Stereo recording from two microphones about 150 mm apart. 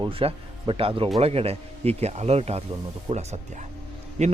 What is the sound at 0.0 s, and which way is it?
A man's voice, 40° right (ahead or behind).